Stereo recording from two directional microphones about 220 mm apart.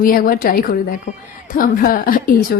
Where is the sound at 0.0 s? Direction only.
40° left (ahead or behind).